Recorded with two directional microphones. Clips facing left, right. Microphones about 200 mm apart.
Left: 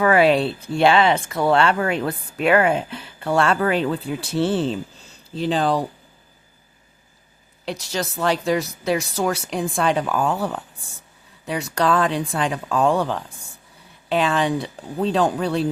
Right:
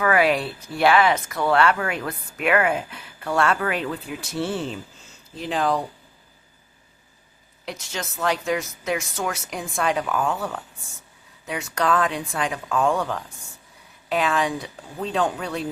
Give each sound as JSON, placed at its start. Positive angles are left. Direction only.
{"t": 0.0, "sound": "speech", "side_deg": 30}
{"t": 7.6, "sound": "speech", "side_deg": 30}